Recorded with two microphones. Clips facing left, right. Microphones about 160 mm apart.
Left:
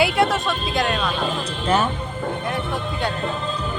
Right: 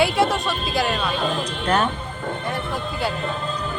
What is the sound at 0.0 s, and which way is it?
Speech, centre (ahead or behind).